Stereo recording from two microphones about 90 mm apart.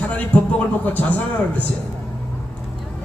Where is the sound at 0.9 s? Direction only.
20° left (ahead or behind).